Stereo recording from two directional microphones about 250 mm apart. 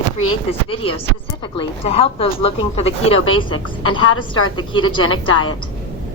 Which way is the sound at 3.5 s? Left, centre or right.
Left.